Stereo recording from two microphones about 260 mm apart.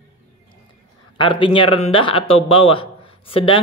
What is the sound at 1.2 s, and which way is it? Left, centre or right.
Speech, centre.